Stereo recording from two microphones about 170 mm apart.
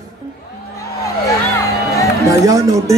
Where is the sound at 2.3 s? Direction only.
20° right (ahead or behind).